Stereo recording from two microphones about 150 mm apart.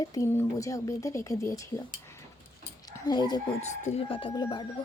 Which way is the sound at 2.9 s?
25° left (ahead or behind).